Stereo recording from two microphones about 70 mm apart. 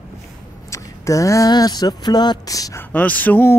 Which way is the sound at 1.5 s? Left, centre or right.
Left.